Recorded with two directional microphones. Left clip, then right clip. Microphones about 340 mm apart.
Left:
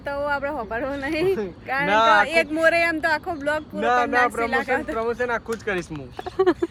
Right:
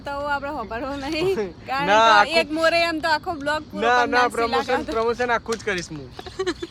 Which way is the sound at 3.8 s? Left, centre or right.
Right.